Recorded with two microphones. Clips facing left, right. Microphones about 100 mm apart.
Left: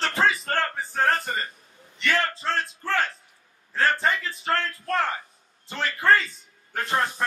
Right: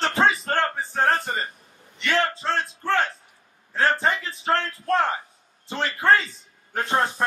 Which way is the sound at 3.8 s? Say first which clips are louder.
Right 1 dB; 30° right (ahead or behind).